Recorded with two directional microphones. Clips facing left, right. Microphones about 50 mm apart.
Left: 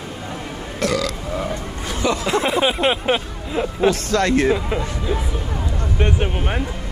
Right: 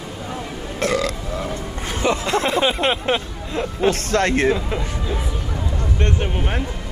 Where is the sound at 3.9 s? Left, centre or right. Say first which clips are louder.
Left 1 dB; right.